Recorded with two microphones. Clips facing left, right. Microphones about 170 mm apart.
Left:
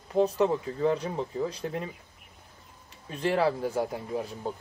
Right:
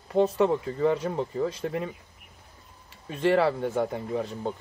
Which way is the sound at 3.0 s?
Centre (ahead or behind).